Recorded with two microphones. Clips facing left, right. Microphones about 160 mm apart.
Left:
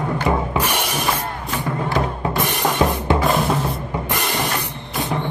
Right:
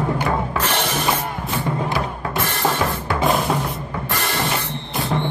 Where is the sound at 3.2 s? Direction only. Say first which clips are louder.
Right 3 dB; centre (ahead or behind).